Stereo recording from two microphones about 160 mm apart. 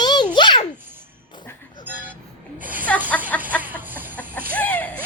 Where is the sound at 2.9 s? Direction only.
5° left (ahead or behind).